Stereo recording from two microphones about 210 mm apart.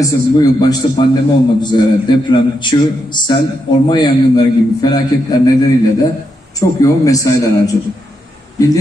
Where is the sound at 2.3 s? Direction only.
20° left (ahead or behind).